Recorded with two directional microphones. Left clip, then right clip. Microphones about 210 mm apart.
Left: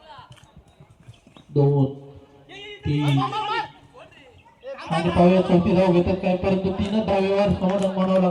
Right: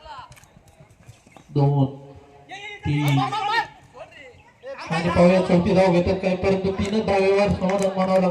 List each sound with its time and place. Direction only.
2.5 s music: 50° right (ahead or behind)
4.7 s chatter: 15° right (ahead or behind)
5.0 s speech: 55° right (ahead or behind)